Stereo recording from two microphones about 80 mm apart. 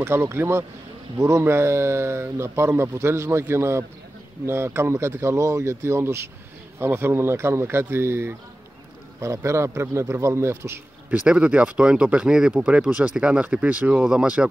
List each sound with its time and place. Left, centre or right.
0.0 s speech: right
11.1 s speech: centre